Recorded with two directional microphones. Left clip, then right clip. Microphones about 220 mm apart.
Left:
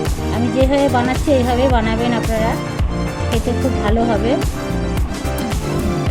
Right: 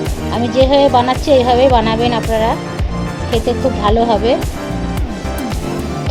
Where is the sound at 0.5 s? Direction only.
15° right (ahead or behind).